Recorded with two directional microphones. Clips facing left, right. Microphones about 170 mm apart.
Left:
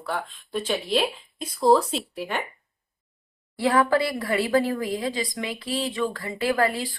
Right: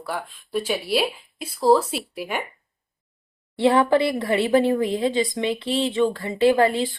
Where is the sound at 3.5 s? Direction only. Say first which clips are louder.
Right 3 dB; 25° right (ahead or behind).